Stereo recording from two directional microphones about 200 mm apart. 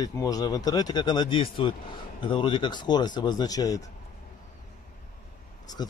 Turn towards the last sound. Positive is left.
turn(degrees=20)  # may be behind; listen again after turning